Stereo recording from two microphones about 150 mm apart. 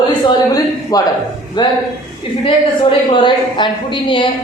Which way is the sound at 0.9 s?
25° left (ahead or behind).